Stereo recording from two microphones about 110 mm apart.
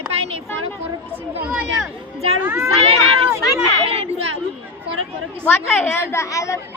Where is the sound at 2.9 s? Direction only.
65° right (ahead or behind).